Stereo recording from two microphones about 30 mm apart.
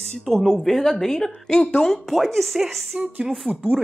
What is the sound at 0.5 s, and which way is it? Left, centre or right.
A woman's voice, centre.